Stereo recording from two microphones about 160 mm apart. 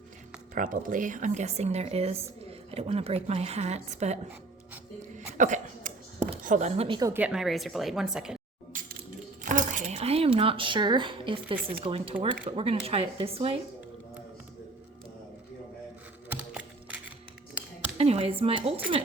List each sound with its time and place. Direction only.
0.5 s a woman's voice: 55° right (ahead or behind)
5.4 s a sound: 50° right (ahead or behind)
6.4 s speech: 50° right (ahead or behind); by 7.1 s 30° right (ahead or behind)
7.1 s a woman's voice: 10° right (ahead or behind)
9.4 s speech: 50° right (ahead or behind); by 13.6 s 35° right (ahead or behind)
16.3 s a sound: 10° right (ahead or behind)
17.9 s speech: 40° right (ahead or behind)